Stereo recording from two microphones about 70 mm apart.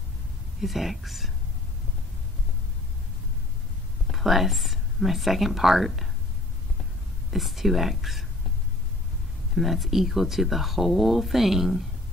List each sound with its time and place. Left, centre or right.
0.6 s speech: centre
4.1 s speech: centre
7.3 s speech: centre
9.6 s speech: centre